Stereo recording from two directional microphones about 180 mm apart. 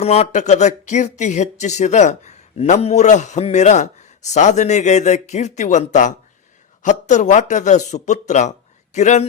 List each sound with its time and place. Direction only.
0.0 s speech: 35° left (ahead or behind)